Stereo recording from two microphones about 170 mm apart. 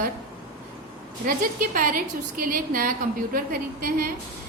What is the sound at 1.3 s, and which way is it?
A woman's voice, 55° right (ahead or behind).